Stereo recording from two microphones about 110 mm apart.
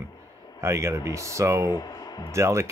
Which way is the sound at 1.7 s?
35° left (ahead or behind).